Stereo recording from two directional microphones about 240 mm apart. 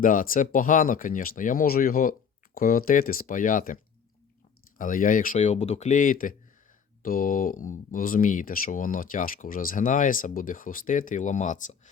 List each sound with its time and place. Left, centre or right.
0.0 s speech: left
4.8 s speech: left